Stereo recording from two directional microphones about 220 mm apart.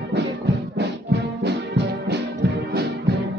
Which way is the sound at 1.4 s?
50° right (ahead or behind).